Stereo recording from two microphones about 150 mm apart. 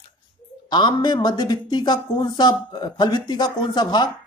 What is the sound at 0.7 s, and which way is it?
Speech, 30° left (ahead or behind).